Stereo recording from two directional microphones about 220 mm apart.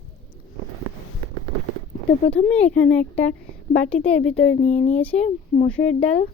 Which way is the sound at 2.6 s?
35° left (ahead or behind).